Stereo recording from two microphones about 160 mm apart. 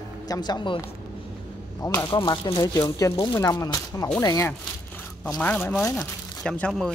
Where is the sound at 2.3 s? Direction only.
25° left (ahead or behind).